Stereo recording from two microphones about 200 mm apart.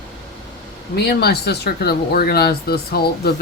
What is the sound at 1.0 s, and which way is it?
Speech, 55° left (ahead or behind).